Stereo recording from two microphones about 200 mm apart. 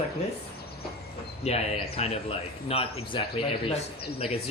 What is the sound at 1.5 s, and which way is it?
Speech, 30° left (ahead or behind).